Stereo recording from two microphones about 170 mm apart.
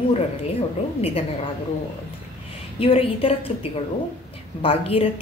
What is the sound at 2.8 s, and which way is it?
Speech, 35° left (ahead or behind).